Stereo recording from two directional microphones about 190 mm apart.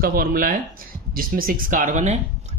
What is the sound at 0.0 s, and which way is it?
Speech, 50° right (ahead or behind).